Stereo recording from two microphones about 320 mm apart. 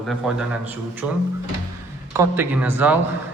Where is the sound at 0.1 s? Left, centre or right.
Centre.